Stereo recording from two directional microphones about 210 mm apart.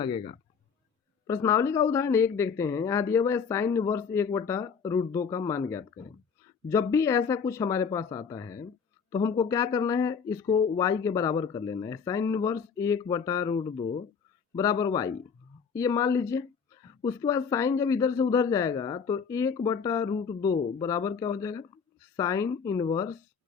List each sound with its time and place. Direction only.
0.0 s speech: 25° left (ahead or behind)